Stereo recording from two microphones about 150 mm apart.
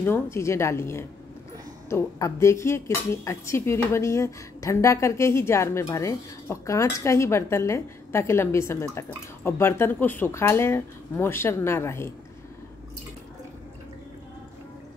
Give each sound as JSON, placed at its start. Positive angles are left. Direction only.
{"t": 0.0, "sound": "speech", "side_deg": 15}